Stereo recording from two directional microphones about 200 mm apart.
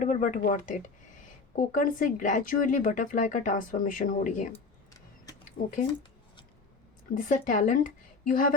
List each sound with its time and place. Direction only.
0.0 s speech: 40° left (ahead or behind)
5.6 s speech: 50° left (ahead or behind)
7.3 s speech: 40° left (ahead or behind)